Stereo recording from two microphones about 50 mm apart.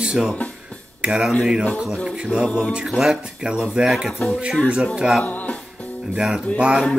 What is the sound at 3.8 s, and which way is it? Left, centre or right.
Speech, right.